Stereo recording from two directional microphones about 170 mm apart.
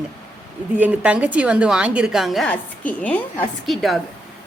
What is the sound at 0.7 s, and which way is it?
A woman's voice, 10° right (ahead or behind).